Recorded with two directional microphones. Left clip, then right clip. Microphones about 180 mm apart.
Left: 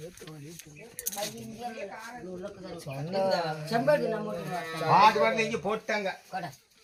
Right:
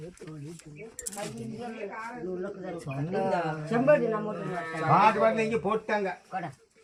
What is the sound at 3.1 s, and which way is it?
Speech, 5° left (ahead or behind).